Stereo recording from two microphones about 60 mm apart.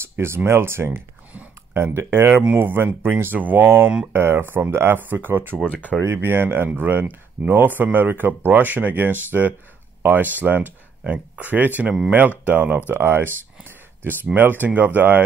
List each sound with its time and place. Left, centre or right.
0.5 s speech: right
5.7 s speech: left
6.2 s speech: right